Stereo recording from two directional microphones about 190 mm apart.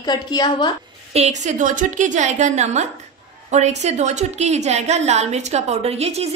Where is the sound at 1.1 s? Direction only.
35° right (ahead or behind).